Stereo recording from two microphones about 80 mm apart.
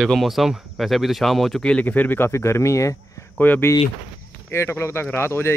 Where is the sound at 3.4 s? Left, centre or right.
Left.